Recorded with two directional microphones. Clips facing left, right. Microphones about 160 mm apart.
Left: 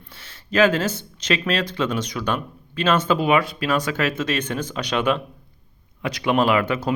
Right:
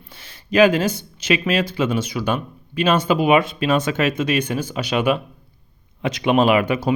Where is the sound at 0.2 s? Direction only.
15° right (ahead or behind).